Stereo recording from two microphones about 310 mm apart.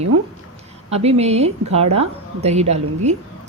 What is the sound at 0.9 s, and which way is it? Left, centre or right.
A woman's voice, centre.